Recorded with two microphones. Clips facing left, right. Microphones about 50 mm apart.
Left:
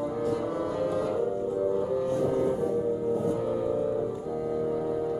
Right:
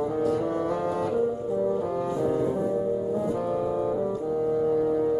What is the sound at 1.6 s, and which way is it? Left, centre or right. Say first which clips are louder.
Music: right 1 dB; centre.